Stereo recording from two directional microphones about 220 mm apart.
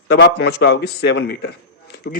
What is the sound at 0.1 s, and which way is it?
A man's voice, 50° left (ahead or behind).